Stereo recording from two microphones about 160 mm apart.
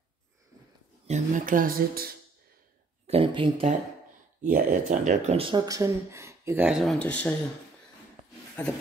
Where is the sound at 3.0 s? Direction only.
35° right (ahead or behind).